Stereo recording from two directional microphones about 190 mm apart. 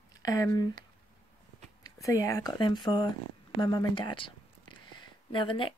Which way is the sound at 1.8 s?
15° left (ahead or behind).